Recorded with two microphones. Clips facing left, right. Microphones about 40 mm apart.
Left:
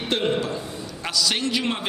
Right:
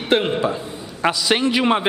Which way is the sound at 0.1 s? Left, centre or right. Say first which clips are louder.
Right 5 dB; right.